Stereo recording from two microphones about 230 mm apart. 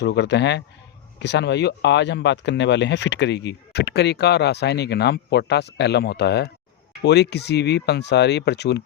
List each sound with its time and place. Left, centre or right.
0.0 s speech: left